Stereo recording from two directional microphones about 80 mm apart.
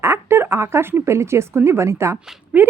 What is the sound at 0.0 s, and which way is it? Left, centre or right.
A woman's voice, right.